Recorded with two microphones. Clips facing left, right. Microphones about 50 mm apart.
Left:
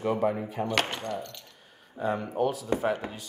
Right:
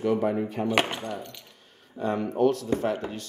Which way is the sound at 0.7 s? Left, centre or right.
Centre.